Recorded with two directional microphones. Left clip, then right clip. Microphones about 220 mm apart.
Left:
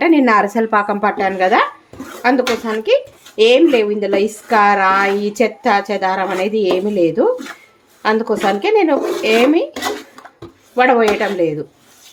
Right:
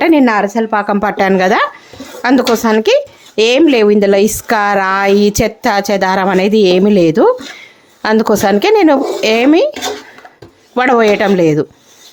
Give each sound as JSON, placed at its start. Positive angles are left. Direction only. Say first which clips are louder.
{"t": 0.0, "sound": "a woman's voice", "louder": "right 2 dB", "side_deg": -30}
{"t": 0.9, "sound": "speech", "louder": "right 4 dB", "side_deg": -40}
{"t": 10.8, "sound": "speech", "louder": "right 3 dB", "side_deg": -45}